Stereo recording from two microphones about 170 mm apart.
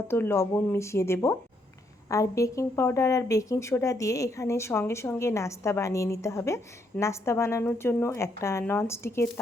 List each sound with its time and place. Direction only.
0.1 s a woman's voice: 15° left (ahead or behind)